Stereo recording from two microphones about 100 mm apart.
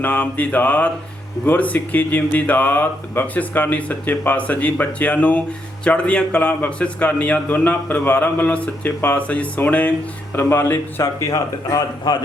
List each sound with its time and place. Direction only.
0.0 s a man's voice: 15° left (ahead or behind)
11.3 s a man's voice: 40° left (ahead or behind)